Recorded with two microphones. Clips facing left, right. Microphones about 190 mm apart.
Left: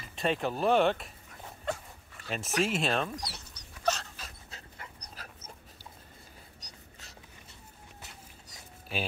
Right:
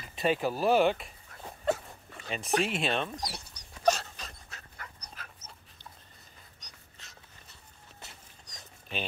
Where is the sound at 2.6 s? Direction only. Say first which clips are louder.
Left 1 dB; centre (ahead or behind).